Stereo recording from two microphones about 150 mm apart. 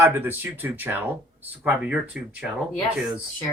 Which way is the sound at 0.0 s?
15° right (ahead or behind).